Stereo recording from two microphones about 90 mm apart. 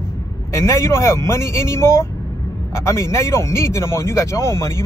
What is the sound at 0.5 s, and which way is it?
Speech, 30° left (ahead or behind).